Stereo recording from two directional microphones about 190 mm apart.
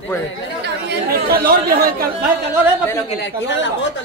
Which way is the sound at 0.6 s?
55° right (ahead or behind).